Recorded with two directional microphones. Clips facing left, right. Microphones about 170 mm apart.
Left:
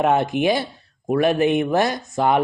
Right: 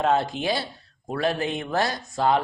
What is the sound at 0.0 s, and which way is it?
Speech, 20° left (ahead or behind).